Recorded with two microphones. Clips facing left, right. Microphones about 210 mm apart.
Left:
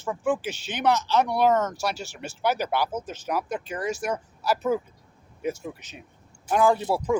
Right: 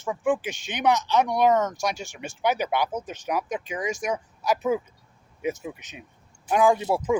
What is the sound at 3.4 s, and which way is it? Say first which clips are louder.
Speech: even; 15° right (ahead or behind).